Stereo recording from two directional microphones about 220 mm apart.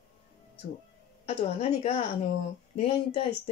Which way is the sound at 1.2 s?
25° left (ahead or behind).